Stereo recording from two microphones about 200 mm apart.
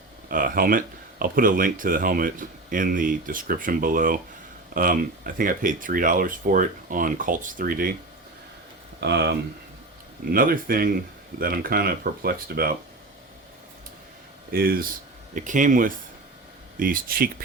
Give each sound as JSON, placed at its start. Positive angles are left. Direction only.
{"t": 0.3, "sound": "speech", "side_deg": -45}
{"t": 9.0, "sound": "speech", "side_deg": -60}
{"t": 10.2, "sound": "speech", "side_deg": -45}
{"t": 14.5, "sound": "speech", "side_deg": -45}